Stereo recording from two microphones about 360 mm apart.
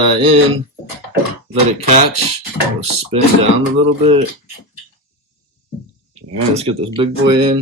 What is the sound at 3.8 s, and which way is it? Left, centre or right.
Speech, centre.